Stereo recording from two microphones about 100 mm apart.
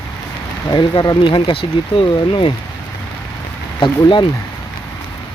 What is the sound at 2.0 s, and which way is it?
Speech, 65° left (ahead or behind).